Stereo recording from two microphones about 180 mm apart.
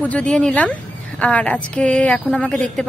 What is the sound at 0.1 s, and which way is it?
A woman's voice, 5° left (ahead or behind).